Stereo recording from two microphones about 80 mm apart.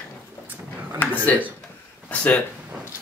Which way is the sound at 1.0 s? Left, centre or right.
Left.